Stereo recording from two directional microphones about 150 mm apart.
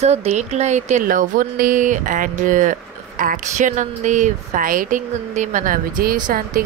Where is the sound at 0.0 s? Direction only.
45° right (ahead or behind).